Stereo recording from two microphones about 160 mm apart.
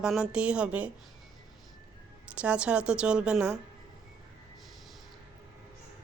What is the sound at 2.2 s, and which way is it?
A woman's voice, 5° right (ahead or behind).